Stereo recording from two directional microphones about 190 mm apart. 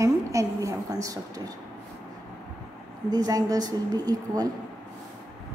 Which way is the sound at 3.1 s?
20° right (ahead or behind).